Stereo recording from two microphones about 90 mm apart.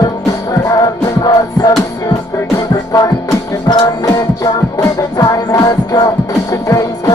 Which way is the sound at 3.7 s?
45° left (ahead or behind).